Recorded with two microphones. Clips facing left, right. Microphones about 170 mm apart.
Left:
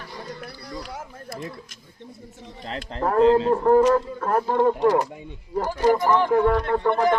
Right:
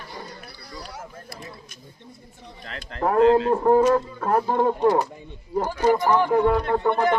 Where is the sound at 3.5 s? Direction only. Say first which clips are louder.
Left 1 dB; 15° right (ahead or behind).